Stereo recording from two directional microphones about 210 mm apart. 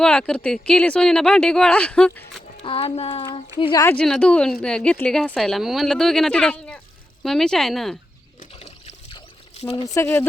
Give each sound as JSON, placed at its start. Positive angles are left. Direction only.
{"t": 0.0, "sound": "speech", "side_deg": 5}
{"t": 2.6, "sound": "speech", "side_deg": 25}
{"t": 3.8, "sound": "speech", "side_deg": 5}
{"t": 8.5, "sound": "pour", "side_deg": 30}
{"t": 9.8, "sound": "speech", "side_deg": 15}